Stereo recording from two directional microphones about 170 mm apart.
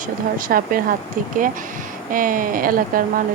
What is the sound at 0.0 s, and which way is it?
Speech, 55° right (ahead or behind).